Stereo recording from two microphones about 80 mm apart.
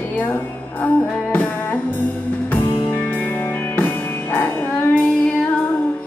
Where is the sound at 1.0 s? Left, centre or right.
Left.